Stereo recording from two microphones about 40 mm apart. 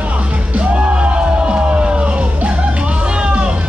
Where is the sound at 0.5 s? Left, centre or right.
Right.